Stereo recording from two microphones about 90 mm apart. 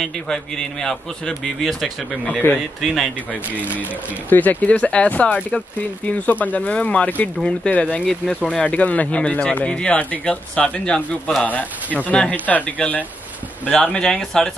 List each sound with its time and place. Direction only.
0.0 s a man's voice: 5° left (ahead or behind)
4.3 s speech: 20° left (ahead or behind)
12.0 s speech: 15° left (ahead or behind)